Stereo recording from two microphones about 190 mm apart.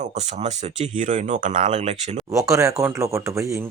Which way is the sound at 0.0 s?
35° right (ahead or behind).